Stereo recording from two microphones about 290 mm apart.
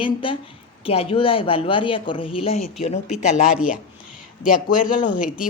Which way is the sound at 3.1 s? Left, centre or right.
Centre.